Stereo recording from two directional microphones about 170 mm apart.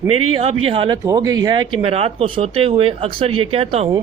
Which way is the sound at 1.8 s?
35° right (ahead or behind).